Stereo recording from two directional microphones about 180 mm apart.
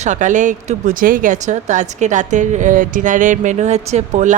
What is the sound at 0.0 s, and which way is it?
Speech, 45° right (ahead or behind).